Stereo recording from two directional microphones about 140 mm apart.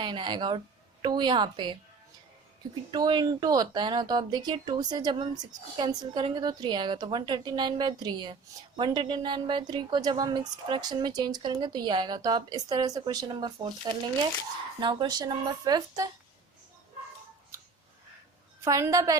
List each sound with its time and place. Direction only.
0.0 s a woman's voice: 35° right (ahead or behind)
2.9 s a woman's voice: 30° right (ahead or behind)
18.6 s a woman's voice: 20° right (ahead or behind)